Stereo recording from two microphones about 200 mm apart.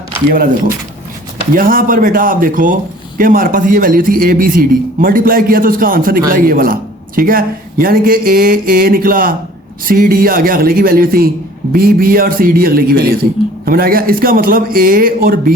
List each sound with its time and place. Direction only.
0.3 s a man's voice: 45° right (ahead or behind)
1.5 s a man's voice: 45° right (ahead or behind)